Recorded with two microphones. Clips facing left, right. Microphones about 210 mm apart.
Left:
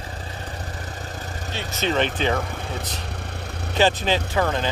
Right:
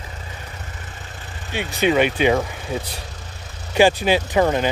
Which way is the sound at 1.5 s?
15° right (ahead or behind).